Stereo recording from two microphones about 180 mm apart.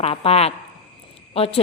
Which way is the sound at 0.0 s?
35° left (ahead or behind).